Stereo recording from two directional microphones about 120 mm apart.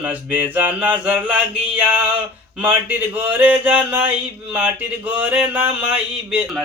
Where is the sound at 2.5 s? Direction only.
15° right (ahead or behind).